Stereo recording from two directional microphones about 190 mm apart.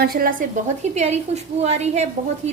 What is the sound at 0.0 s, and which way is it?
A woman's voice, 50° right (ahead or behind).